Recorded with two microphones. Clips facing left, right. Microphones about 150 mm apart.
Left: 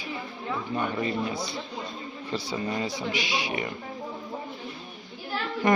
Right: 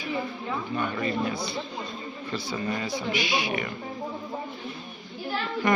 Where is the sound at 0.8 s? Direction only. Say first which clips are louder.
Even; 20° left (ahead or behind).